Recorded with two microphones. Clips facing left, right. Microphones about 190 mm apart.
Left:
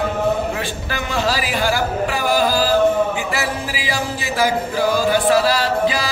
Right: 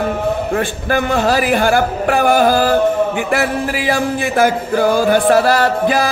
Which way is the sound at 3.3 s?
55° right (ahead or behind).